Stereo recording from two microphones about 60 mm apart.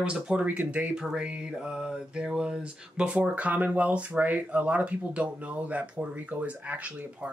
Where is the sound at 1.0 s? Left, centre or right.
Centre.